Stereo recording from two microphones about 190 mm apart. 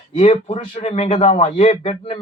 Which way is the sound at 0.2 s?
35° left (ahead or behind).